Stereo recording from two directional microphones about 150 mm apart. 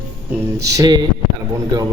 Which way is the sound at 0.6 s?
20° right (ahead or behind).